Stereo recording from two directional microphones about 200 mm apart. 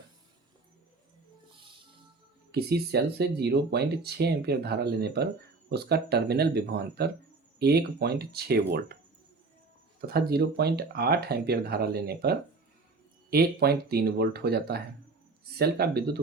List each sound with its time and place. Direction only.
2.5 s speech: 55° right (ahead or behind)
10.1 s speech: 50° right (ahead or behind)